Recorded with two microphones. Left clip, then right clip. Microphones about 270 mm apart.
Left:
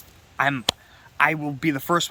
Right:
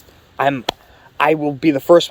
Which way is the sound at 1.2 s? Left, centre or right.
Left.